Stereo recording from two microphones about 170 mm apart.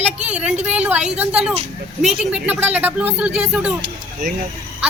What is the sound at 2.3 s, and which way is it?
A woman's voice, 10° right (ahead or behind).